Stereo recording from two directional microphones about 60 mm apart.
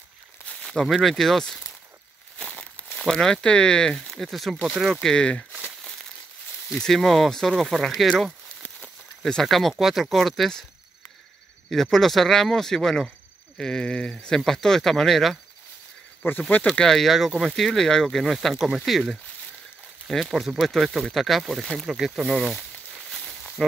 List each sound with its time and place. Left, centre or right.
0.7 s speech: centre
2.3 s a sound: centre
3.2 s speech: centre
4.1 s speech: centre
5.0 s speech: centre
6.7 s speech: centre
11.7 s speech: centre
16.2 s speech: left
16.7 s speech: centre